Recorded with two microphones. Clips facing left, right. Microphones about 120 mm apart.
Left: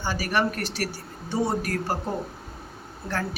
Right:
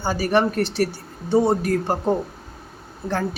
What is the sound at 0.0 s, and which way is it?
Speech, 30° right (ahead or behind).